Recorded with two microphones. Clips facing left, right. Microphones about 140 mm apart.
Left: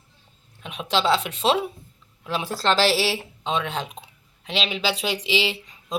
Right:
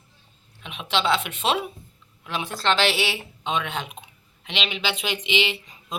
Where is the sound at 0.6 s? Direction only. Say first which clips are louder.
Left 2 dB; 40° left (ahead or behind).